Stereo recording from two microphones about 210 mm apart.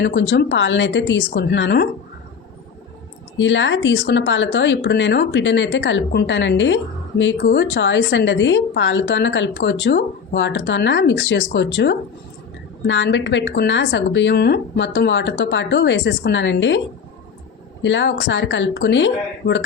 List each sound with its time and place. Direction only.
0.0 s a woman's voice: 55° left (ahead or behind)
3.3 s a woman's voice: 60° left (ahead or behind)
17.8 s a woman's voice: 60° left (ahead or behind)